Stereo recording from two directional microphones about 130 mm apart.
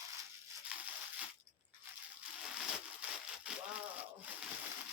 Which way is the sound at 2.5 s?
10° right (ahead or behind).